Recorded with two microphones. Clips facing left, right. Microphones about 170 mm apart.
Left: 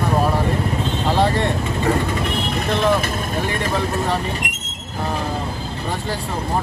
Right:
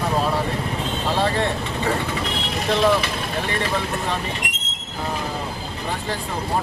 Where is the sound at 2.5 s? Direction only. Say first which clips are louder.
Right 1 dB; 55° left (ahead or behind).